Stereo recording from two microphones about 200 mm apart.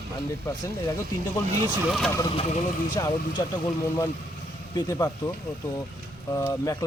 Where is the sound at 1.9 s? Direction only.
Centre (ahead or behind).